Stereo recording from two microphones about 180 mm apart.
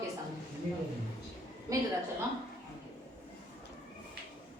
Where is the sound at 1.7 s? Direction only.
20° right (ahead or behind).